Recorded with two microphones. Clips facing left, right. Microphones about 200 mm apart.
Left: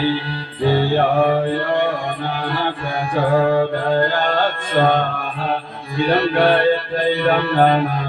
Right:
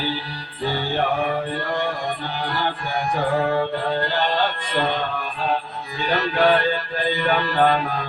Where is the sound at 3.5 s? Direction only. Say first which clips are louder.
Left 5 dB; 50° left (ahead or behind).